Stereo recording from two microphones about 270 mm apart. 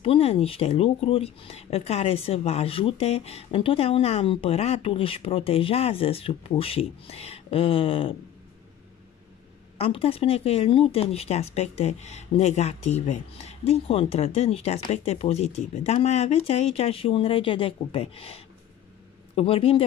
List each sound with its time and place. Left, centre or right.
0.0 s speech: left
9.8 s speech: left